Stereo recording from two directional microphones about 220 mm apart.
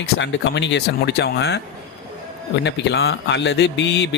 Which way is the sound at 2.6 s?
50° left (ahead or behind).